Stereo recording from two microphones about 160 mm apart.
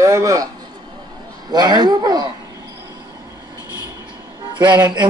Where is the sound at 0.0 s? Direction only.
20° right (ahead or behind).